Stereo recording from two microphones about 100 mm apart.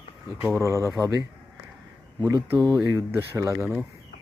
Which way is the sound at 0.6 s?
30° right (ahead or behind).